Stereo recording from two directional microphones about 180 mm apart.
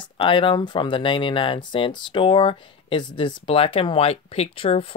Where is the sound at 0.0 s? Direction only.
30° left (ahead or behind).